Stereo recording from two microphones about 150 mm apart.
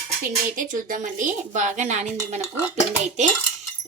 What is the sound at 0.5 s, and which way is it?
A woman's voice, 65° right (ahead or behind).